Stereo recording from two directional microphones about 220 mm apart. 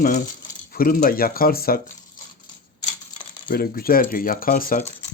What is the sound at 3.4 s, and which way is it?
Speech, 40° left (ahead or behind).